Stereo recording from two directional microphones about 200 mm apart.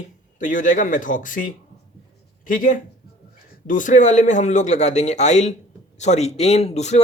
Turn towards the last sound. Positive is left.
turn(degrees=35)  # may be behind; listen again after turning